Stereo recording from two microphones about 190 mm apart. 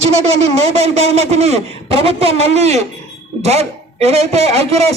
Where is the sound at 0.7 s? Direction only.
35° right (ahead or behind).